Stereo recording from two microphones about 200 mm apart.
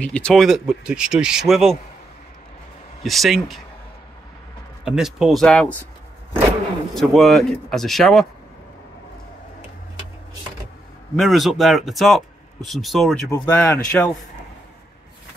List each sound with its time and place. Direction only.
0.0 s speech: 5° left (ahead or behind)
3.0 s speech: centre (ahead or behind)
4.8 s speech: centre (ahead or behind)
6.9 s speech: centre (ahead or behind)
11.1 s speech: centre (ahead or behind)
13.3 s speech: 15° left (ahead or behind)